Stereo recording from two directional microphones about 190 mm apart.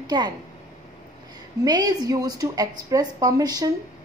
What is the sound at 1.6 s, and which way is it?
A woman's voice, 20° right (ahead or behind).